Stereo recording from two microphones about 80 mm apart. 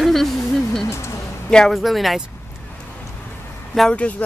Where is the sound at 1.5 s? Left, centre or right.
Centre.